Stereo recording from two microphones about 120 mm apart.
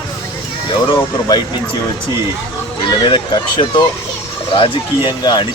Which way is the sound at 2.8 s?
45° left (ahead or behind).